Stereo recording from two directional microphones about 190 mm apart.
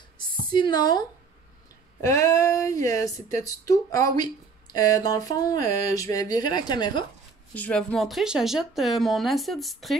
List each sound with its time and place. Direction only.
0.5 s speech: 25° left (ahead or behind)
7.5 s speech: 5° left (ahead or behind)